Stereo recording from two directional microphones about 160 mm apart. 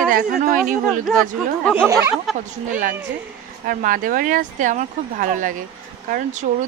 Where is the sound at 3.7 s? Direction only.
60° right (ahead or behind).